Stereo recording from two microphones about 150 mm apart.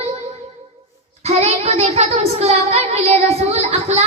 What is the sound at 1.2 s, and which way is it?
Child singing, 45° right (ahead or behind).